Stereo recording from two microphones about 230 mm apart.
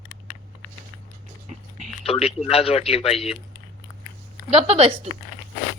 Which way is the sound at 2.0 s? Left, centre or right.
Left.